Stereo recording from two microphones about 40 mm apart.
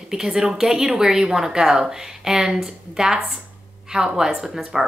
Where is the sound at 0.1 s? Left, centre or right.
Centre.